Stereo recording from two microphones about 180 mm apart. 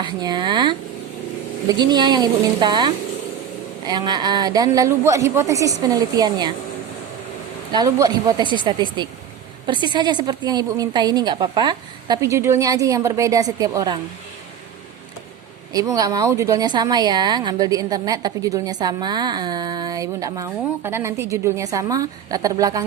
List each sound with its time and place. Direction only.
0.0 s speech: 25° right (ahead or behind)
1.8 s speech: 25° right (ahead or behind)
7.7 s speech: 20° right (ahead or behind)
15.7 s speech: 20° right (ahead or behind)